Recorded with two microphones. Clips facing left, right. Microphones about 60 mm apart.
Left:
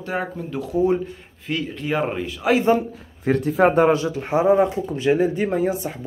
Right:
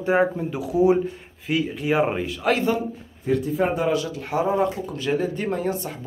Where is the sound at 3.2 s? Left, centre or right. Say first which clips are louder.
Left 5 dB; left.